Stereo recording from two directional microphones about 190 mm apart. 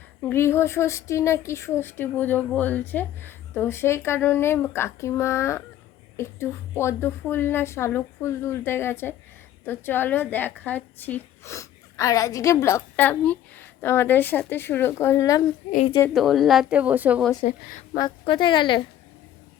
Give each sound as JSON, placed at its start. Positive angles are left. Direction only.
{"t": 0.2, "sound": "a woman's voice", "side_deg": 10}
{"t": 16.0, "sound": "a woman's voice", "side_deg": 0}
{"t": 17.9, "sound": "a woman's voice", "side_deg": 25}